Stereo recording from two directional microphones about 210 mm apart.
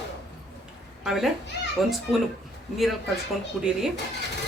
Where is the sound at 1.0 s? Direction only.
Centre (ahead or behind).